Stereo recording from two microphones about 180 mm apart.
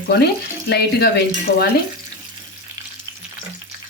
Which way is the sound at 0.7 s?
65° left (ahead or behind).